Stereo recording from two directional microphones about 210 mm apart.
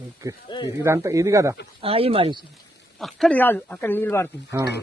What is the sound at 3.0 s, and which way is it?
Speech, centre (ahead or behind).